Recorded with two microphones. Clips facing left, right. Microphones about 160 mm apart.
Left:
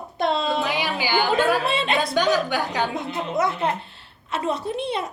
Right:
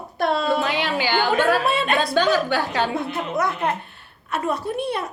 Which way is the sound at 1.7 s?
25° left (ahead or behind).